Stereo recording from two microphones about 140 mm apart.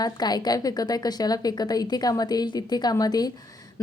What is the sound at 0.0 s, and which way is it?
A woman's voice, 30° left (ahead or behind).